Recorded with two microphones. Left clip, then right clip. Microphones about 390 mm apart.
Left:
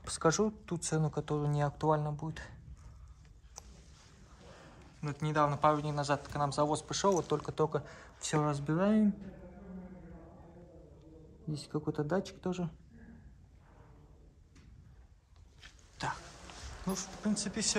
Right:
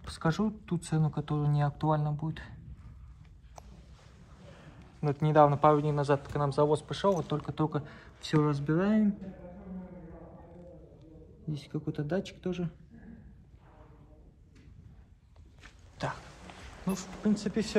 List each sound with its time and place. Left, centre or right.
0.2 s speech: centre
5.0 s speech: centre
11.5 s speech: centre
16.0 s speech: centre